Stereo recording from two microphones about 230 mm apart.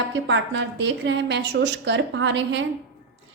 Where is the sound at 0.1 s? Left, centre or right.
Right.